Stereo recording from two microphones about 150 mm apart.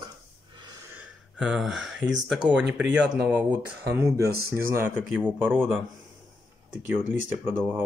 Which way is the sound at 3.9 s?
20° right (ahead or behind).